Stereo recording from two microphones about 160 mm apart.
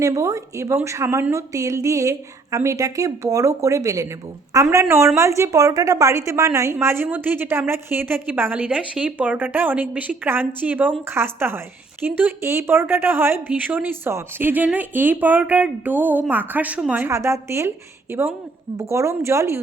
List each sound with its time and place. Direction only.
0.0 s a woman's voice: 20° right (ahead or behind)